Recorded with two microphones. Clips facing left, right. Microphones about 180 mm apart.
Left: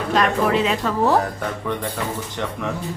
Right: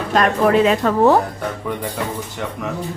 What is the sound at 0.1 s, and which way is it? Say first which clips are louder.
Speech: right 4 dB; 50° right (ahead or behind).